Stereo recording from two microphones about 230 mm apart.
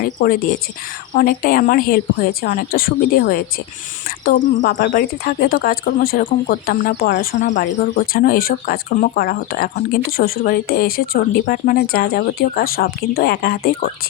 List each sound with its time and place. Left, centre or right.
0.0 s speech: left
7.3 s speech: left